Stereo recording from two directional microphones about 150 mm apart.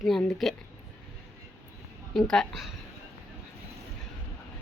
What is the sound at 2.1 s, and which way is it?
Speech, 5° left (ahead or behind).